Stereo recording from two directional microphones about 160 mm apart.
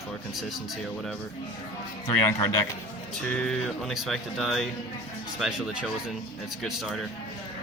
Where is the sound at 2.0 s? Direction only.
20° left (ahead or behind).